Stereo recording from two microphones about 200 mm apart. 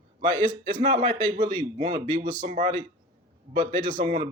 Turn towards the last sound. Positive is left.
turn(degrees=-25)  # may be behind; listen again after turning